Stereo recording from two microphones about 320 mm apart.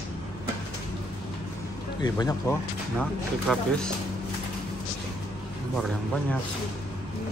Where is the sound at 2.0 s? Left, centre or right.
Centre.